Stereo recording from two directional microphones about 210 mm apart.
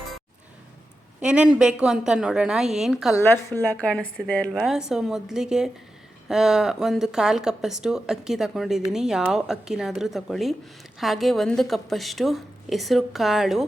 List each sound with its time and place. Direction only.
1.2 s a woman's voice: 5° right (ahead or behind)
3.2 s a woman's voice: 10° left (ahead or behind)